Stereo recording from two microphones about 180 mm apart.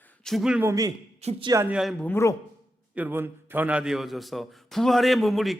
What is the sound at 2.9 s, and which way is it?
A man's voice, 10° right (ahead or behind).